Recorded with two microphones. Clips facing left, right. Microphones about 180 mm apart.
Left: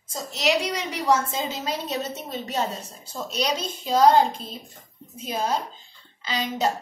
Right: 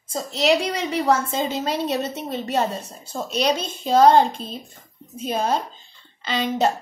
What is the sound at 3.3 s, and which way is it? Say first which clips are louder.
Speech: right 5 dB; 55° right (ahead or behind).